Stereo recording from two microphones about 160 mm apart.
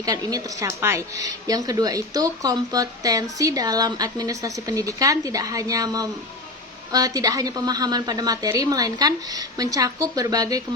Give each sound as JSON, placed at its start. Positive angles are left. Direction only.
{"t": 0.0, "sound": "speech", "side_deg": -25}